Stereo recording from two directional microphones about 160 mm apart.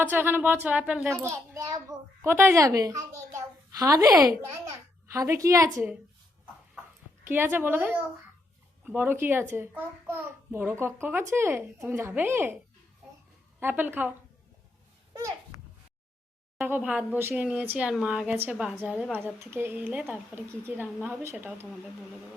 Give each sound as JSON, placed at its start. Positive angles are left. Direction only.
{"t": 0.1, "sound": "a child's voice", "side_deg": -10}
{"t": 7.3, "sound": "a child's voice", "side_deg": -15}
{"t": 13.6, "sound": "a child's voice", "side_deg": -10}
{"t": 15.5, "sound": "a sound", "side_deg": 20}
{"t": 16.6, "sound": "a child's voice", "side_deg": -10}